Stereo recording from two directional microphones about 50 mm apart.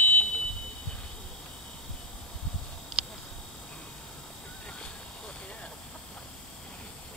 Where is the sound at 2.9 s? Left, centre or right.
Centre.